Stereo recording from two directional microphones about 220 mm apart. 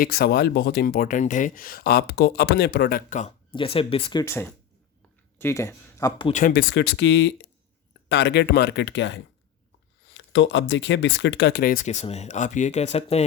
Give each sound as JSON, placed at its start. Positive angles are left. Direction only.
{"t": 0.0, "sound": "speech", "side_deg": 45}
{"t": 3.5, "sound": "speech", "side_deg": 25}
{"t": 6.3, "sound": "speech", "side_deg": 45}